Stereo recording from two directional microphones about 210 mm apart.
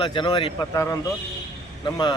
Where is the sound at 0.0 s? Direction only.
20° left (ahead or behind).